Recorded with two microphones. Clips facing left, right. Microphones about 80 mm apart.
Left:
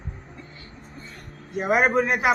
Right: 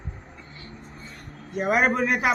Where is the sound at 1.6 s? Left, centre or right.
Centre.